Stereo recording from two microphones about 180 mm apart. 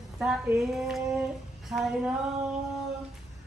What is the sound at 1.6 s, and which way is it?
Music, centre (ahead or behind).